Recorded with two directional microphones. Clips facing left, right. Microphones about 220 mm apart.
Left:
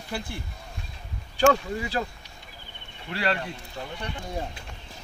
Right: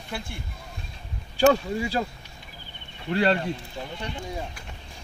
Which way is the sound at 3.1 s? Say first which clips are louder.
Right 6 dB; 25° right (ahead or behind).